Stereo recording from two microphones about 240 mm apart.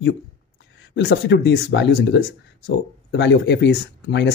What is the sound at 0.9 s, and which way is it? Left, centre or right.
Speech, left.